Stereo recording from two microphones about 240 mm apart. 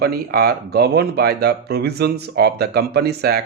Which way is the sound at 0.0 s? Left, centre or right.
Right.